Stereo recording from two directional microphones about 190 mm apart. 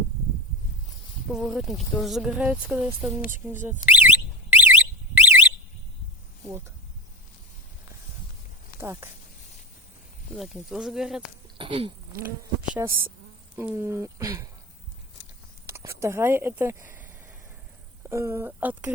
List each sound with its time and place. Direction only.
1.3 s speech: centre (ahead or behind)
3.8 s alarm: 10° right (ahead or behind)
8.8 s speech: 15° right (ahead or behind)
10.3 s speech: centre (ahead or behind)
11.5 s speech: 25° right (ahead or behind)
12.2 s speech: 10° right (ahead or behind)
15.6 s speech: 15° right (ahead or behind)
18.1 s speech: 15° right (ahead or behind)